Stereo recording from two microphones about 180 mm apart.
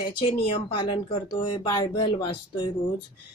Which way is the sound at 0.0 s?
25° left (ahead or behind).